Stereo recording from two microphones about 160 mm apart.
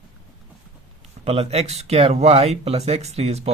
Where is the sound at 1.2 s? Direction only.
40° right (ahead or behind).